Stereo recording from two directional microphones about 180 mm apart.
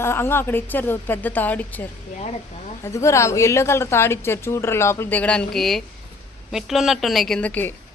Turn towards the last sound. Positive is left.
turn(degrees=10)  # may be behind; listen again after turning